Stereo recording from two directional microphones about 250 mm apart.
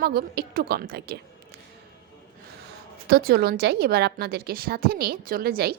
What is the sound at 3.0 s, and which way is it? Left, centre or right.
A woman's voice, right.